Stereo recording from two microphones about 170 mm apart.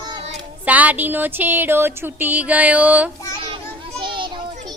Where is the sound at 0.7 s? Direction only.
10° right (ahead or behind).